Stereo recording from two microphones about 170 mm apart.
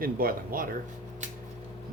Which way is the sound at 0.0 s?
60° right (ahead or behind).